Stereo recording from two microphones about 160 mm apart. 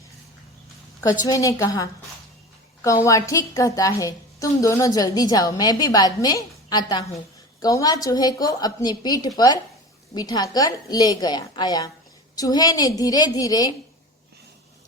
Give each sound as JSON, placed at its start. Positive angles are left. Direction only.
{"t": 1.3, "sound": "a woman's voice", "side_deg": 20}